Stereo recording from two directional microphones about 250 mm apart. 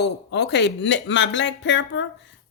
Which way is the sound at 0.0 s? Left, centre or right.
Left.